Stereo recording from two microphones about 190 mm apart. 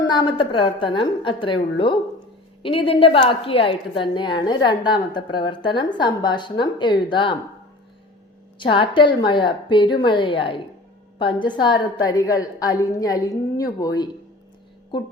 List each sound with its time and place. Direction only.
0.0 s a woman's voice: 25° left (ahead or behind)
8.5 s a woman's voice: 25° left (ahead or behind)